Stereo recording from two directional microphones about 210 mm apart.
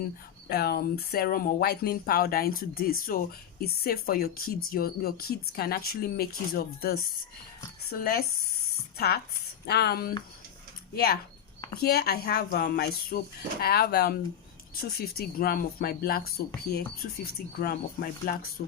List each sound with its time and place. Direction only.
0.4 s speech: 50° left (ahead or behind)